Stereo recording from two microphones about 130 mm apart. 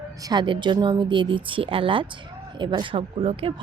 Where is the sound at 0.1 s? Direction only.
30° right (ahead or behind).